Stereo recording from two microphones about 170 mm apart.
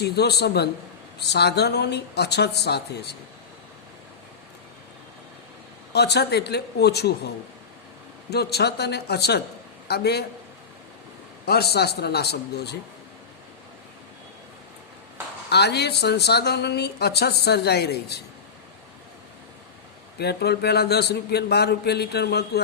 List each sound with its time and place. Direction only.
0.0 s a woman's voice: 70° left (ahead or behind)
5.9 s a woman's voice: 75° left (ahead or behind)
8.3 s a woman's voice: 70° left (ahead or behind)
11.4 s a woman's voice: 70° left (ahead or behind)
15.4 s a woman's voice: 75° left (ahead or behind)
20.1 s a woman's voice: 70° left (ahead or behind)